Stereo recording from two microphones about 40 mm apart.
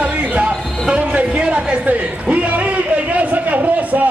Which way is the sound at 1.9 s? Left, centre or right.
Right.